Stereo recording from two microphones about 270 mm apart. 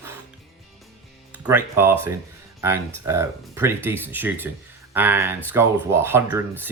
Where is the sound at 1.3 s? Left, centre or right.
Centre.